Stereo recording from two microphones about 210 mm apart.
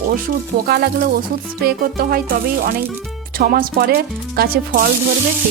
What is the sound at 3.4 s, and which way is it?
Speech, 45° right (ahead or behind).